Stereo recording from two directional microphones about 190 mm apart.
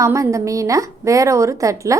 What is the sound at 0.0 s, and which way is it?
A woman's voice, 15° right (ahead or behind).